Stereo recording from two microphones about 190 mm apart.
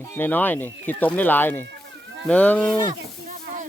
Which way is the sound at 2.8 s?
40° right (ahead or behind).